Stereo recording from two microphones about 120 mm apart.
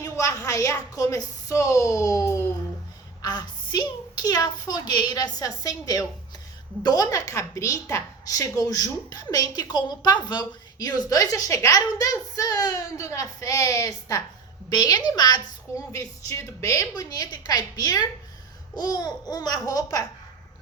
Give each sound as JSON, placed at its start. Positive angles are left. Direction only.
{"t": 0.0, "sound": "a woman's voice", "side_deg": 30}